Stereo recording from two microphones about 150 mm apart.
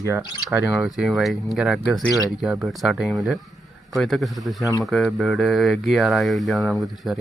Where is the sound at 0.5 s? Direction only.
5° right (ahead or behind).